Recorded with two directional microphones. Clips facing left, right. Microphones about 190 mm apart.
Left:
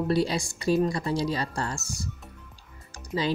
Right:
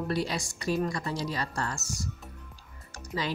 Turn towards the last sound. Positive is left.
turn(degrees=30)  # may be behind; listen again after turning